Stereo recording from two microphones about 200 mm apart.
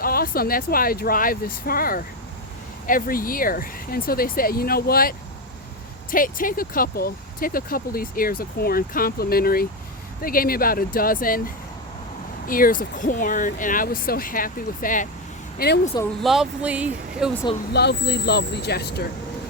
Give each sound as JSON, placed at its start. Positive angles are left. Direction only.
{"t": 0.0, "sound": "speech", "side_deg": 50}
{"t": 16.2, "sound": "speech", "side_deg": 0}
{"t": 17.7, "sound": "speech", "side_deg": 55}